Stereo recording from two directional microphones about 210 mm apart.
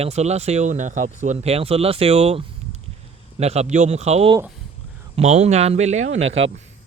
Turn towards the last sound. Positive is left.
turn(degrees=-65)  # may be behind; listen again after turning